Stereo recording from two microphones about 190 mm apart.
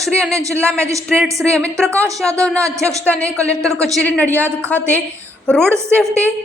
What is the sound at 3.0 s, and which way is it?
A woman's voice, 5° left (ahead or behind).